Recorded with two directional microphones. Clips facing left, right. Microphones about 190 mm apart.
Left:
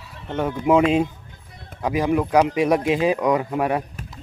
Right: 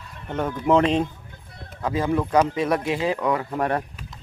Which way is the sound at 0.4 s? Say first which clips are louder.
Left 2 dB; 10° left (ahead or behind).